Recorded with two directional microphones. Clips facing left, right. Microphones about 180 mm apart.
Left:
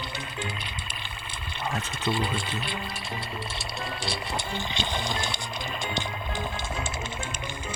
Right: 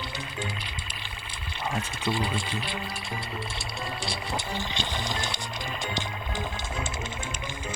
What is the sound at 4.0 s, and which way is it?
Speech, 60° left (ahead or behind).